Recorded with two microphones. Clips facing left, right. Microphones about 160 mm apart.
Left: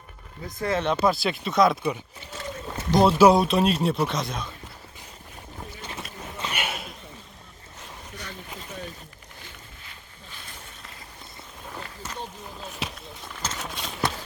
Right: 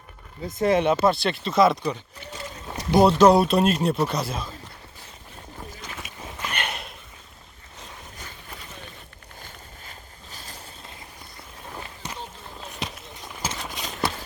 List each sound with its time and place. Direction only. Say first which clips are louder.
0.4 s speech: right 6 dB; 20° right (ahead or behind)
0.9 s speech: right 2 dB; centre (ahead or behind)
6.5 s sniff: right 1 dB; 5° left (ahead or behind)
10.3 s vehicle: right 3 dB; 35° right (ahead or behind)
11.8 s rowboat: even; 15° right (ahead or behind)
12.5 s a sound: right 1 dB; centre (ahead or behind)
13.6 s clip-clop: left 1 dB; centre (ahead or behind)